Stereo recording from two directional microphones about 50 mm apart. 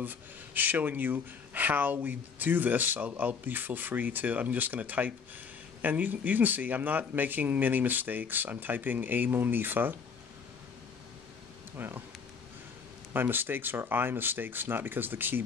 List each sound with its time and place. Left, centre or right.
0.0 s speech: right
11.8 s speech: right
13.1 s speech: right